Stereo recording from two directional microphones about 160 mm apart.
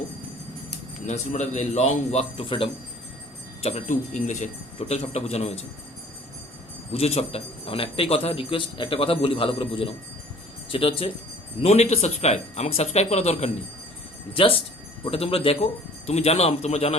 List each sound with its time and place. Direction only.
1.0 s speech: 45° left (ahead or behind)
3.6 s speech: 45° left (ahead or behind)
6.9 s a man's voice: 40° left (ahead or behind)